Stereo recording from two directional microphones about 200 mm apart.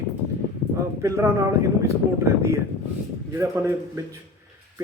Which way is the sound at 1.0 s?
15° right (ahead or behind).